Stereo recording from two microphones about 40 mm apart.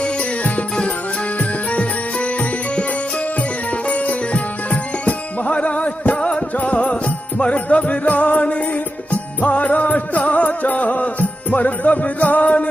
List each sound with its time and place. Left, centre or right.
0.0 s music: left
3.8 s music: left